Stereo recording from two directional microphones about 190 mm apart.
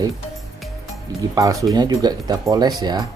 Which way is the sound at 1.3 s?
20° right (ahead or behind).